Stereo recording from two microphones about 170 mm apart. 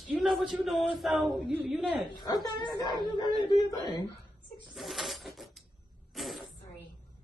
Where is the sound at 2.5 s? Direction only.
25° left (ahead or behind).